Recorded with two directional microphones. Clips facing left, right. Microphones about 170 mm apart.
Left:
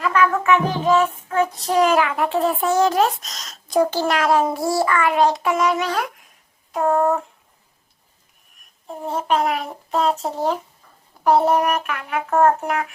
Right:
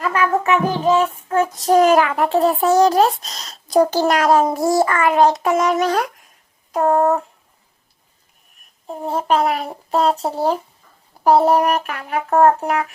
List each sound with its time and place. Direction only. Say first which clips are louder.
0.0 s music: even; 35° right (ahead or behind)
1.5 s a child's voice: right 6 dB; 45° right (ahead or behind)
9.0 s a child's voice: right 3 dB; 35° right (ahead or behind)